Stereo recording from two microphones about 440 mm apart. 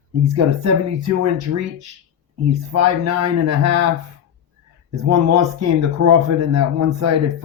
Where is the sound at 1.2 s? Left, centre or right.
Right.